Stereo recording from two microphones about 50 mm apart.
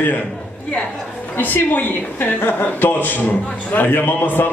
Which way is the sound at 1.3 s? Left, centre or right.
Left.